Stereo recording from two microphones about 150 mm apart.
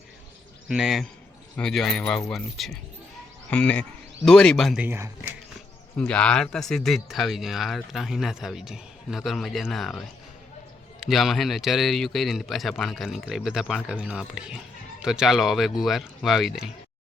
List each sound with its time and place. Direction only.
0.7 s speech: 5° right (ahead or behind)
4.8 s speech: 15° right (ahead or behind)
6.0 s speech: 5° left (ahead or behind)
11.0 s speech: centre (ahead or behind)